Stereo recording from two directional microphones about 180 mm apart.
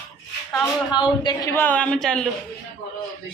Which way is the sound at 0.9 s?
25° left (ahead or behind).